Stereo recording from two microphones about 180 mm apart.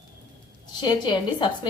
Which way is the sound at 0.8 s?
25° left (ahead or behind).